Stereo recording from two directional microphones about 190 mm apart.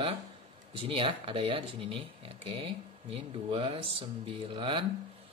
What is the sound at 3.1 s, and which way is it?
Speech, 30° right (ahead or behind).